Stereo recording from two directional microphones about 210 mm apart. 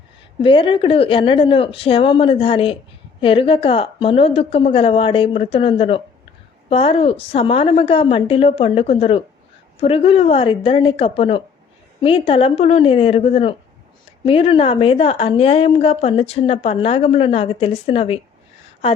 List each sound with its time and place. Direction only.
0.4 s a woman's voice: 25° left (ahead or behind)